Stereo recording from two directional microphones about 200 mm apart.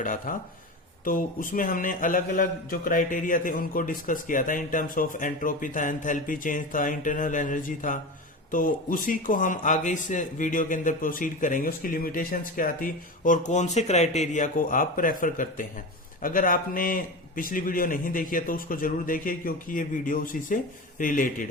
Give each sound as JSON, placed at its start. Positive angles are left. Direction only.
{"t": 0.0, "sound": "speech", "side_deg": 40}